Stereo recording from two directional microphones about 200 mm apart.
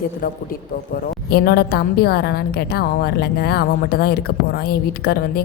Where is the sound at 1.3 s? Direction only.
55° left (ahead or behind).